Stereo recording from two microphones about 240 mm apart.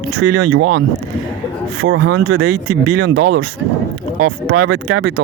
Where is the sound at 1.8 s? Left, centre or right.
Right.